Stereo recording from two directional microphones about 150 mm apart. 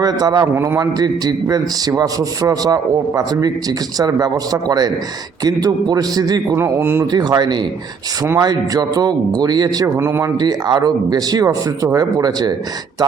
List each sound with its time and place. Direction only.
0.0 s a man's voice: 25° right (ahead or behind)
7.1 s a man's voice: 30° right (ahead or behind)
10.3 s a man's voice: 30° right (ahead or behind)